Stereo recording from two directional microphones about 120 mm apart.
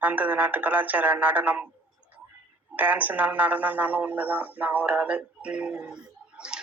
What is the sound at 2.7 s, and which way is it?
Speech, 15° right (ahead or behind).